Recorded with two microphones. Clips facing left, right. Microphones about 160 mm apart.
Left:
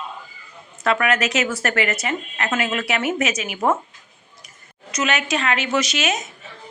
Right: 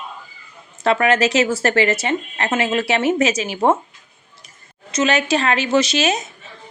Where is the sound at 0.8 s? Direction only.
30° right (ahead or behind).